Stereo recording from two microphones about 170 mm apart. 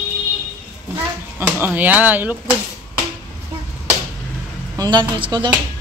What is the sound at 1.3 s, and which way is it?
Speech, 10° right (ahead or behind).